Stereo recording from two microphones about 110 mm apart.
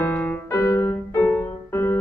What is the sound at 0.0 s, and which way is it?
Piano, 20° left (ahead or behind).